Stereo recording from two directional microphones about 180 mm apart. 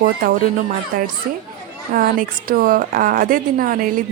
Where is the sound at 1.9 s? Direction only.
50° right (ahead or behind).